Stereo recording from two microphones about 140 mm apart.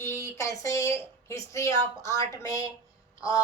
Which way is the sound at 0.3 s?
20° left (ahead or behind).